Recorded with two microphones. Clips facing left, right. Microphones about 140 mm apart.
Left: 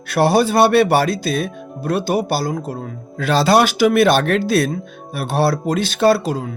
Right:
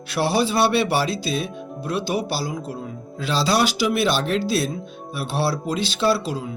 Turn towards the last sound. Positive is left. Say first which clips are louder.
# left 6 dB
turn(degrees=50)  # may be behind; listen again after turning